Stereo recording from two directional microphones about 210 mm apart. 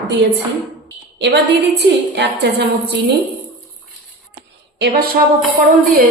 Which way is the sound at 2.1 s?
55° right (ahead or behind).